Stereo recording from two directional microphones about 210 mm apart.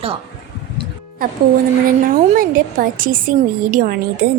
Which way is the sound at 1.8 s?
40° right (ahead or behind).